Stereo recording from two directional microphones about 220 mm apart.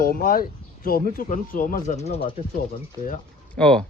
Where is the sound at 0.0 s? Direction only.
40° left (ahead or behind).